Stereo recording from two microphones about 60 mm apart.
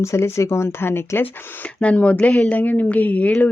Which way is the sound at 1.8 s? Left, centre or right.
Left.